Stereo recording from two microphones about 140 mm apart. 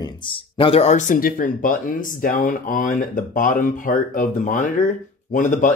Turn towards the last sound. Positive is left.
turn(degrees=65)  # may be behind; listen again after turning